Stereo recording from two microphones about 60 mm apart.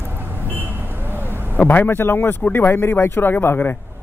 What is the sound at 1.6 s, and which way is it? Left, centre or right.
A man's voice, left.